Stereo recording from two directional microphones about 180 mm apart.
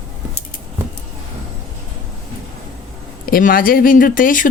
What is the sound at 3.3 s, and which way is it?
Speech, 50° left (ahead or behind).